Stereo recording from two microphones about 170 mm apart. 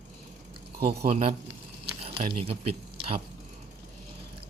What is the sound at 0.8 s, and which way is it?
Speech, 35° right (ahead or behind).